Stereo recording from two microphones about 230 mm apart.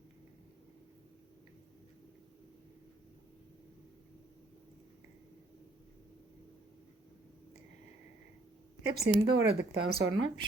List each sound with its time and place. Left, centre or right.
9.0 s speech: right